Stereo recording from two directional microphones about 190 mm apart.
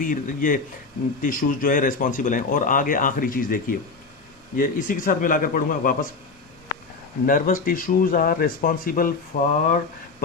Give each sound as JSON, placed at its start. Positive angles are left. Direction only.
{"t": 0.0, "sound": "speech", "side_deg": 45}
{"t": 7.3, "sound": "speech", "side_deg": 50}